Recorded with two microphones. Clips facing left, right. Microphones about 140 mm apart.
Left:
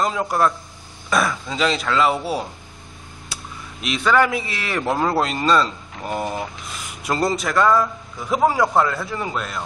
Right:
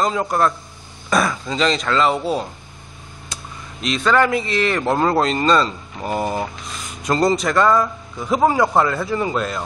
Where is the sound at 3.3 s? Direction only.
10° left (ahead or behind).